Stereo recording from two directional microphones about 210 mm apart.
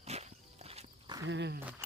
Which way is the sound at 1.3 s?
55° right (ahead or behind).